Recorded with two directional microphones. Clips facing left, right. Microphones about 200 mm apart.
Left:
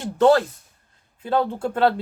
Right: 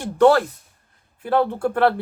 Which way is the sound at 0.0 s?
20° left (ahead or behind).